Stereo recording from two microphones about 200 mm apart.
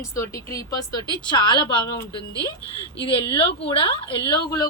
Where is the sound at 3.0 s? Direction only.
25° left (ahead or behind).